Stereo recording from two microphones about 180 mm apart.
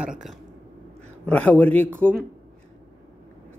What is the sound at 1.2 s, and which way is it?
A man's voice, 5° left (ahead or behind).